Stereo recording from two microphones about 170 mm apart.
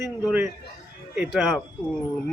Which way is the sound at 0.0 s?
10° right (ahead or behind).